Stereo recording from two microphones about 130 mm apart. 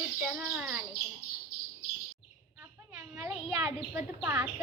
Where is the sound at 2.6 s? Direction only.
15° right (ahead or behind).